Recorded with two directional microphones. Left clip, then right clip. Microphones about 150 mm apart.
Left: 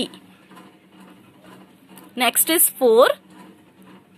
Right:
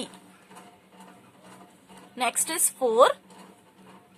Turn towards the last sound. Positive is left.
turn(degrees=30)  # may be behind; listen again after turning